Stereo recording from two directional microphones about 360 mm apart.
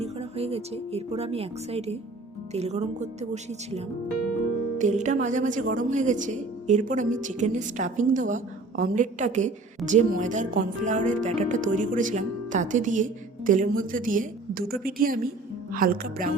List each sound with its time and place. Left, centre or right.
0.0 s speech: centre